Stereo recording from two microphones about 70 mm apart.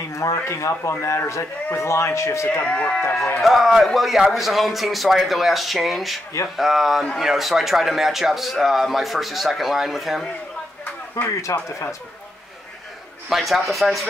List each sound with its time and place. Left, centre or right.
0.2 s a man's voice: left
2.6 s speech: centre
3.4 s a man's voice: centre
11.4 s a man's voice: left
13.3 s a man's voice: centre